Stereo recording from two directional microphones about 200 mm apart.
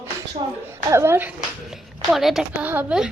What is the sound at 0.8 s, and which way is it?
A woman's voice, 10° right (ahead or behind).